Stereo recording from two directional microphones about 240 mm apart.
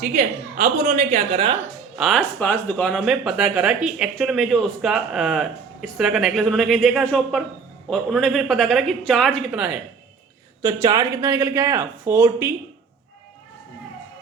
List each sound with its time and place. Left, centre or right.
0.0 s speech: right
2.0 s speech: centre